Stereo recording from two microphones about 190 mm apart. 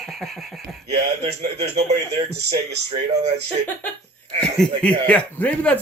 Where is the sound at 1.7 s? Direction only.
35° right (ahead or behind).